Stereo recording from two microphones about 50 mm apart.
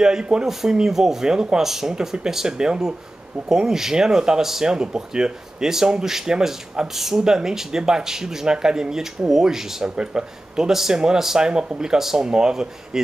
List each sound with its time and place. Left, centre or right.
0.0 s speech: centre